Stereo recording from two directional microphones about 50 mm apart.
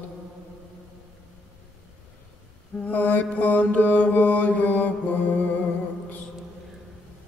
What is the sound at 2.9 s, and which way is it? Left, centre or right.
Mantra, left.